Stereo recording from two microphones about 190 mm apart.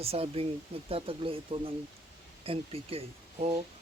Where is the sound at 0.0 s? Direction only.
30° right (ahead or behind).